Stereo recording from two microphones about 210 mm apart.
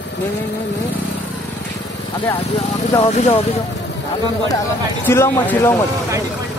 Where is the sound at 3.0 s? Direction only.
30° left (ahead or behind).